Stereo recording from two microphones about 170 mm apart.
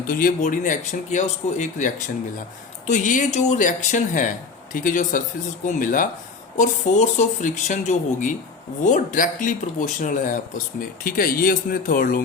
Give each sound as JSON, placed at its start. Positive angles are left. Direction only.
{"t": 0.0, "sound": "speech", "side_deg": 55}